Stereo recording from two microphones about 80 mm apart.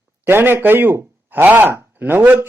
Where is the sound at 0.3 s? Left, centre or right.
Right.